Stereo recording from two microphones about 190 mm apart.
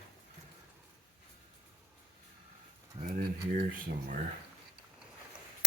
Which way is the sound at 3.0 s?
50° right (ahead or behind).